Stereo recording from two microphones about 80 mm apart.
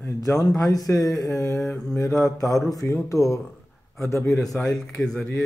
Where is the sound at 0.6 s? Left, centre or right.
Left.